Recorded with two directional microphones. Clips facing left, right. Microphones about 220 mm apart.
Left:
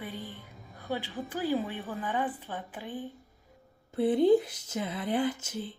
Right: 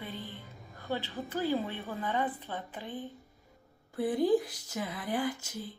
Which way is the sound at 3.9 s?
25° left (ahead or behind).